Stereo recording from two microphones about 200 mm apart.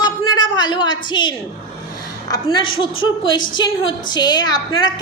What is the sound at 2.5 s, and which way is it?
A woman's voice, 25° left (ahead or behind).